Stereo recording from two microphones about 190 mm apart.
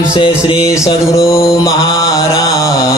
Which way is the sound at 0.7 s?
15° left (ahead or behind).